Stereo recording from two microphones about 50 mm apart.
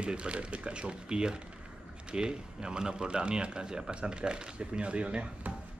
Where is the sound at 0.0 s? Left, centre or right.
Right.